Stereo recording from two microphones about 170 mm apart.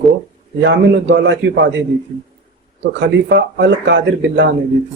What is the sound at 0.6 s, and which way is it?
Speech, 90° right.